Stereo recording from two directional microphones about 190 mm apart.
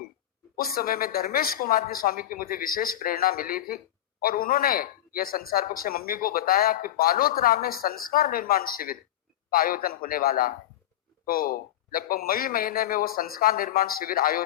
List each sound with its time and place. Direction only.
0.5 s a woman's voice: 50° left (ahead or behind)